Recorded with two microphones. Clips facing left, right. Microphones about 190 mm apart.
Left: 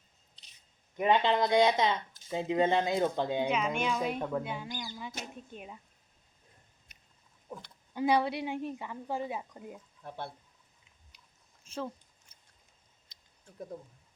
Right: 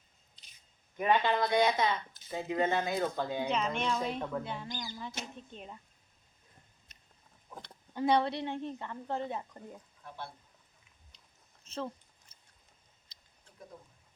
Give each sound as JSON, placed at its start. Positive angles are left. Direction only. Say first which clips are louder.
{"t": 0.9, "sound": "speech", "louder": "left 2 dB", "side_deg": 20}
{"t": 3.5, "sound": "speech", "louder": "left 1 dB", "side_deg": 5}
{"t": 7.6, "sound": "speech", "louder": "left 1 dB", "side_deg": 5}
{"t": 11.6, "sound": "a sound", "louder": "left 1 dB", "side_deg": 5}